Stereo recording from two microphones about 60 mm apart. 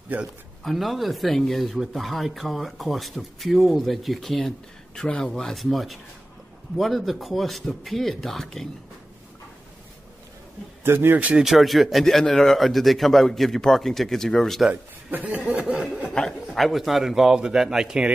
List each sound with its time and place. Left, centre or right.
0.7 s speech: centre
10.8 s a man's voice: right
11.3 s speech: centre
14.7 s a man's voice: right
15.3 s snicker: centre
16.1 s a man's voice: centre